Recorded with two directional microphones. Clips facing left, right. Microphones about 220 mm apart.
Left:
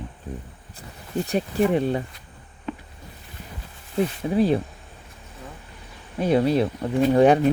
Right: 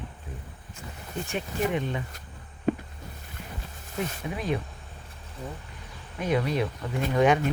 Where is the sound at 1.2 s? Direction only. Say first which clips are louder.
Left 7 dB; 40° left (ahead or behind).